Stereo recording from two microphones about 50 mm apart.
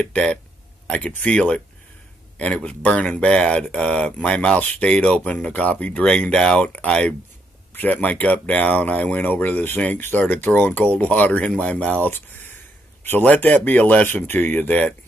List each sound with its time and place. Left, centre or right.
0.0 s speech: left
2.3 s speech: left
7.7 s speech: left
13.2 s speech: left
14.0 s speech: left